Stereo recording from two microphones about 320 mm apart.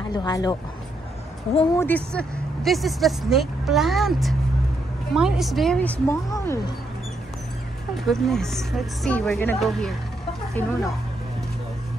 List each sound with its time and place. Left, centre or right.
0.1 s speech: centre
1.9 s speech: centre
8.1 s speech: centre